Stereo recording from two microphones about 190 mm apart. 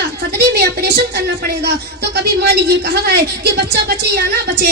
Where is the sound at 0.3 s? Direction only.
55° right (ahead or behind).